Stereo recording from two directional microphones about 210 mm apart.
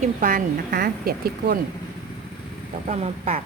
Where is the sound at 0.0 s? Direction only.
40° right (ahead or behind).